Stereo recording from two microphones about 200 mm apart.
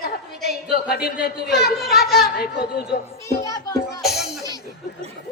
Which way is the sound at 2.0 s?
Centre (ahead or behind).